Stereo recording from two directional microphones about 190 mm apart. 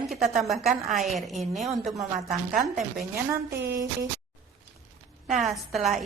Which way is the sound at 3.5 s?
60° right (ahead or behind).